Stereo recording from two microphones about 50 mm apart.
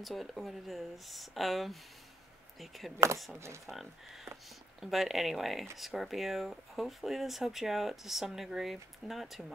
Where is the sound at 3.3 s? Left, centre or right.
Right.